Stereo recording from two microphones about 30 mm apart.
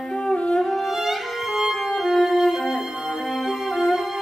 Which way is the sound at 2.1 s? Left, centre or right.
Centre.